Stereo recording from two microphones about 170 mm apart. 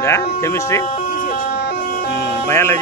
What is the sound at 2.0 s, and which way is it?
Music, 85° left.